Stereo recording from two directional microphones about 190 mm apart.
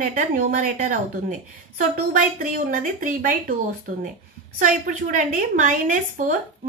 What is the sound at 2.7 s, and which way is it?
Speech, 45° right (ahead or behind).